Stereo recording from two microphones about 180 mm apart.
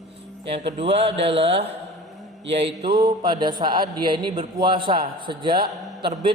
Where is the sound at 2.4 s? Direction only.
70° right (ahead or behind).